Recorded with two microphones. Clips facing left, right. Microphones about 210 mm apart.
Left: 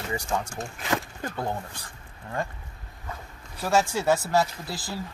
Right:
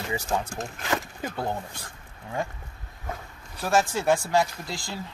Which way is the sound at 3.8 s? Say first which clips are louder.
Even; 10° left (ahead or behind).